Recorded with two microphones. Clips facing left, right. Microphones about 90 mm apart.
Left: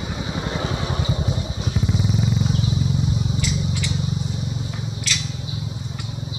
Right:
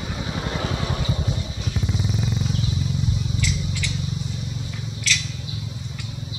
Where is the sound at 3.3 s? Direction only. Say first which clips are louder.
Left 3 dB; 20° left (ahead or behind).